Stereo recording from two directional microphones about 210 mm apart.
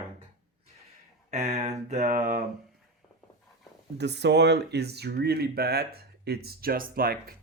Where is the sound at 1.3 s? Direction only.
30° right (ahead or behind).